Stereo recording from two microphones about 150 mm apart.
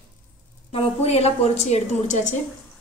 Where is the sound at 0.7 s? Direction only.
45° left (ahead or behind).